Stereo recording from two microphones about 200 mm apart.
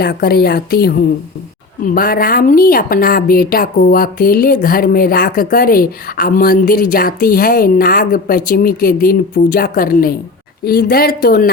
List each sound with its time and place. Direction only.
0.0 s a woman's voice: 50° left (ahead or behind)